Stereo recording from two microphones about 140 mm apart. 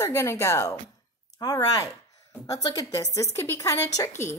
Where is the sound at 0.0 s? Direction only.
20° left (ahead or behind).